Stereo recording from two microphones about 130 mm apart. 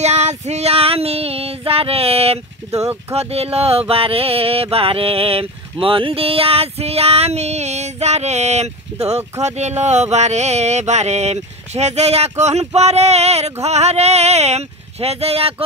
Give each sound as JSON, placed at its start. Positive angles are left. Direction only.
{"t": 0.0, "sound": "female singing", "side_deg": -60}
{"t": 3.1, "sound": "mantra", "side_deg": -50}
{"t": 9.4, "sound": "a sound", "side_deg": -60}